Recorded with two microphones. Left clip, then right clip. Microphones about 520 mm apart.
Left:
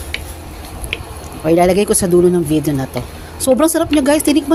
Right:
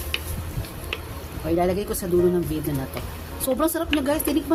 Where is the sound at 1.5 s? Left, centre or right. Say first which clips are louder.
Left 11 dB; right.